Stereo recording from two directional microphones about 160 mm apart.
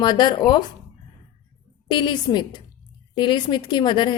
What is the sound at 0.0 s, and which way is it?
Speech, 25° left (ahead or behind).